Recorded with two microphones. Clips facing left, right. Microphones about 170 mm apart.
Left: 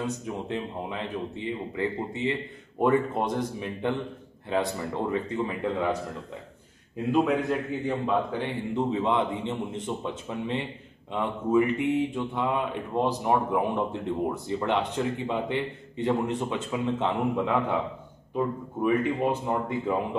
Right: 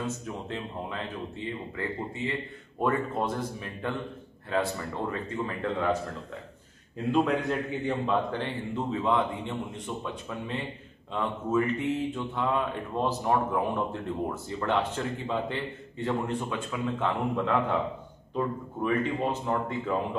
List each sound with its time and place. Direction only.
0.0 s speech: 15° left (ahead or behind)
5.1 s speech: 15° left (ahead or behind)
7.1 s a man's voice: 5° left (ahead or behind)